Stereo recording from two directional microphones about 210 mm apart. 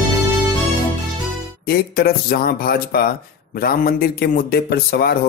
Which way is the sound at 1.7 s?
50° left (ahead or behind).